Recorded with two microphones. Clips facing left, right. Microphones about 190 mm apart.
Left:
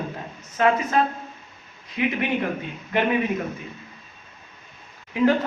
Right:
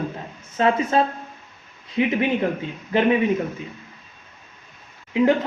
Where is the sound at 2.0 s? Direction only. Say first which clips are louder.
Right 3 dB; 30° right (ahead or behind).